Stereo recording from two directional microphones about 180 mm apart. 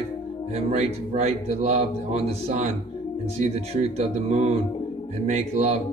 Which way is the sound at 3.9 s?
35° right (ahead or behind).